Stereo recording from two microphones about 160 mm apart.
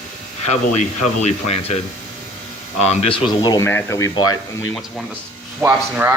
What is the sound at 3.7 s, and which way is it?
Speech, 15° left (ahead or behind).